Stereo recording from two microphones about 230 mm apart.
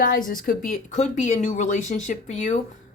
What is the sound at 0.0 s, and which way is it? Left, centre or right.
Speech, left.